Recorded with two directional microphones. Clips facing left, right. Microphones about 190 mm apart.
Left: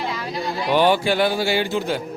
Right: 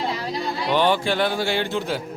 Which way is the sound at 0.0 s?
35° right (ahead or behind).